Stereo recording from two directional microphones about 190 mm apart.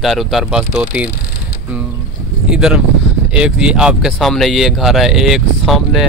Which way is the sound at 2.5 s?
5° right (ahead or behind).